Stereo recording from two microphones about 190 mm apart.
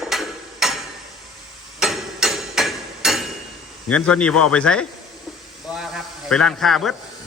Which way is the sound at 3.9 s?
5° left (ahead or behind).